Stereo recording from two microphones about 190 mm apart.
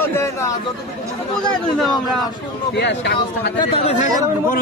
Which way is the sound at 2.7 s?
65° left (ahead or behind).